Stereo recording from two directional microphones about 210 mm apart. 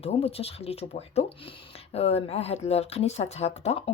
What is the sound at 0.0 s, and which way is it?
Speech, 30° left (ahead or behind).